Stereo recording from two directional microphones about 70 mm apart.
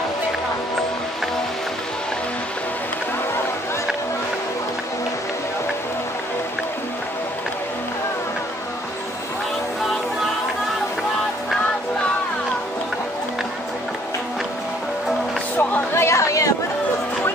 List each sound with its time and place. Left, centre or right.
15.9 s chatter: left